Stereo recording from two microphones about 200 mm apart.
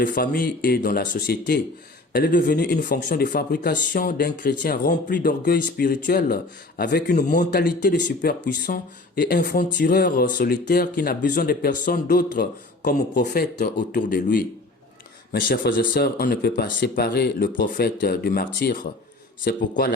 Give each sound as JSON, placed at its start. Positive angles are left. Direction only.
{"t": 0.0, "sound": "speech", "side_deg": 45}